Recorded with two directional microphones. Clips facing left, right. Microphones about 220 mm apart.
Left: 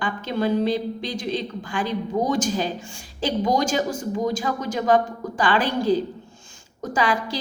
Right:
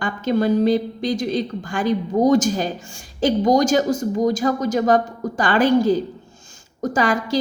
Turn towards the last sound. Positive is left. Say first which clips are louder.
# right 4 dB
turn(degrees=-45)  # may be behind; listen again after turning